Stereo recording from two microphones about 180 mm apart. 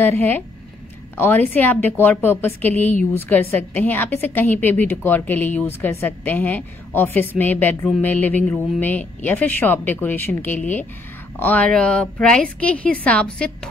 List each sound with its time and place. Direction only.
0.0 s a woman's voice: 10° left (ahead or behind)